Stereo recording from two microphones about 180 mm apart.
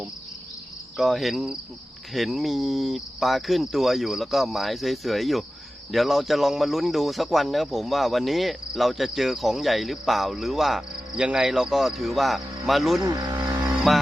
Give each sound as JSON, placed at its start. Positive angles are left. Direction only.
{"t": 0.9, "sound": "speech", "side_deg": 0}
{"t": 13.0, "sound": "speech", "side_deg": -20}
{"t": 13.9, "sound": "speech", "side_deg": 0}